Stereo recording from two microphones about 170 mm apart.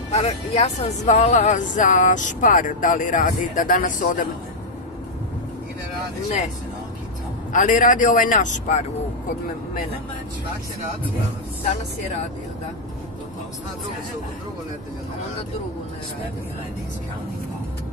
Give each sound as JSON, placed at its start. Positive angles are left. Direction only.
{"t": 0.1, "sound": "speech", "side_deg": 40}
{"t": 7.5, "sound": "speech", "side_deg": 50}